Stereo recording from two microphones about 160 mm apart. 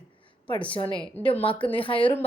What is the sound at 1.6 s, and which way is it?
Speech, 10° left (ahead or behind).